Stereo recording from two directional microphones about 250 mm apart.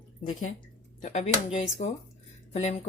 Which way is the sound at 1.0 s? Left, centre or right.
Left.